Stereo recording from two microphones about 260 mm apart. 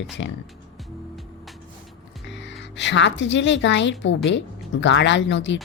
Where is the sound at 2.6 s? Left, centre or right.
Left.